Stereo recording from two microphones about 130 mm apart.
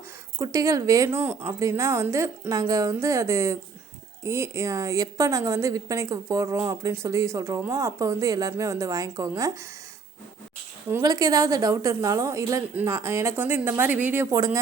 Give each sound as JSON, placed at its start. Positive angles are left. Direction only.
{"t": 0.3, "sound": "a woman's voice", "side_deg": -25}
{"t": 11.0, "sound": "a woman's voice", "side_deg": -30}
{"t": 14.3, "sound": "a woman's voice", "side_deg": -30}